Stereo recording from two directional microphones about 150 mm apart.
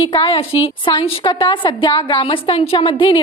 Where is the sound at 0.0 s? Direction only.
35° left (ahead or behind).